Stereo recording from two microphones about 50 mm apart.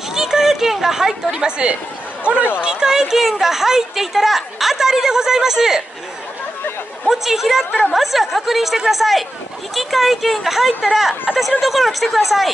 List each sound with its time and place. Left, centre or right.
0.1 s a sound: centre
2.2 s speech: right
2.6 s speech: centre
7.1 s speech: centre